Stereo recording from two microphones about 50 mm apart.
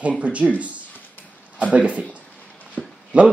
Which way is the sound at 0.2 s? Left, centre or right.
Right.